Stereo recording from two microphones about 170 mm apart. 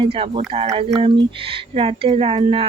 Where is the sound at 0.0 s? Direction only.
30° right (ahead or behind).